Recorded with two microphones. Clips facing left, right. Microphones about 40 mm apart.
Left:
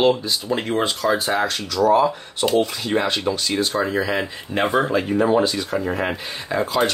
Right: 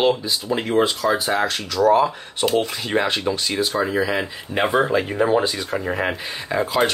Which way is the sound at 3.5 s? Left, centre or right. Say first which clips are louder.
Even; centre.